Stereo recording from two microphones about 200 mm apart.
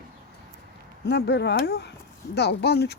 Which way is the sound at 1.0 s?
60° left (ahead or behind).